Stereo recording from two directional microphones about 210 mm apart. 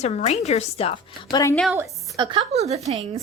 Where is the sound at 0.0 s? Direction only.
30° left (ahead or behind).